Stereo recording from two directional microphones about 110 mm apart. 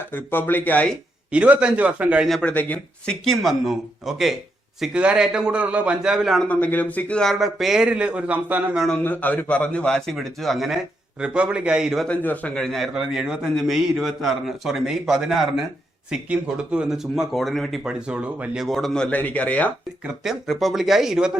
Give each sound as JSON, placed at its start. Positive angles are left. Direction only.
{"t": 0.1, "sound": "a man's voice", "side_deg": 20}
{"t": 1.3, "sound": "a man's voice", "side_deg": -10}
{"t": 2.4, "sound": "a man's voice", "side_deg": 15}
{"t": 6.5, "sound": "speech", "side_deg": 15}
{"t": 9.0, "sound": "a man's voice", "side_deg": 15}
{"t": 12.0, "sound": "speech", "side_deg": 15}
{"t": 20.1, "sound": "speech", "side_deg": 0}